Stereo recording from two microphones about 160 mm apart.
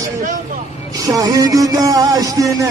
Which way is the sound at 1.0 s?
20° right (ahead or behind).